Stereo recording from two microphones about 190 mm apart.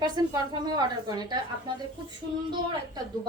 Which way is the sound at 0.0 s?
20° right (ahead or behind).